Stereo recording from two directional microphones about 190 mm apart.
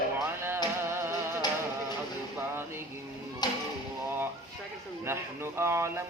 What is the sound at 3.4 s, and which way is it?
Music, 20° left (ahead or behind).